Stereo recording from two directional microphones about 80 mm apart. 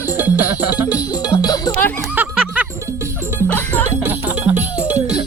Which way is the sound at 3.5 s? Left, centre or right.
Left.